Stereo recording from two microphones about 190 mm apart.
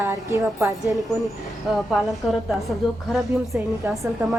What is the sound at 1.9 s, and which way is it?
Speech, centre (ahead or behind).